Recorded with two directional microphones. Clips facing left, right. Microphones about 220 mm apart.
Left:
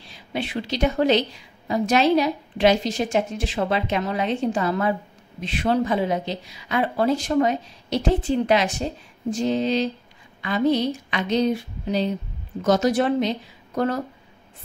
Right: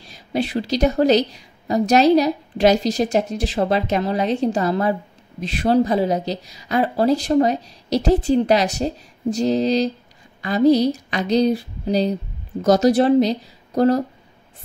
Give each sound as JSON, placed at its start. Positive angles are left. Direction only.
{"t": 0.0, "sound": "a woman's voice", "side_deg": -40}